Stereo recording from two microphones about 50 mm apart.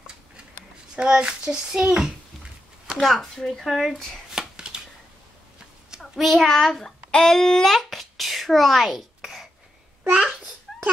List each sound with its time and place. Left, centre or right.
0.9 s a child's voice: centre
3.0 s speech: centre
4.4 s chopping: centre
5.9 s a child's voice: centre
7.1 s a sound: centre
10.0 s babbling: centre